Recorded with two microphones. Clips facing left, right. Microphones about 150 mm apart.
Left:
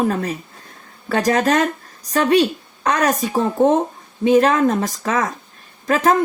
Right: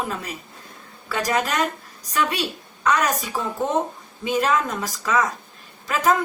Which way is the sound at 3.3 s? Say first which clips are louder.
Left 10 dB; 35° left (ahead or behind).